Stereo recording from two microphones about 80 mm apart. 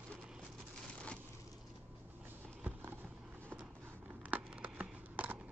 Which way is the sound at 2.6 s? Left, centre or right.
Right.